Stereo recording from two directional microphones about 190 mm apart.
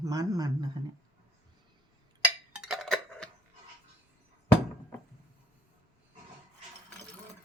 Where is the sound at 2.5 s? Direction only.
5° right (ahead or behind).